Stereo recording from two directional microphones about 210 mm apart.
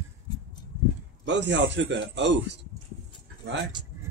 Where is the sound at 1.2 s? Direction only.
60° right (ahead or behind).